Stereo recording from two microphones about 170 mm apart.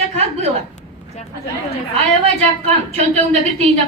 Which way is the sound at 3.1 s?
40° right (ahead or behind).